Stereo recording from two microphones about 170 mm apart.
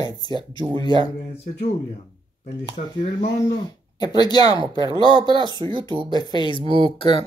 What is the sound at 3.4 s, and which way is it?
Speech, 25° left (ahead or behind).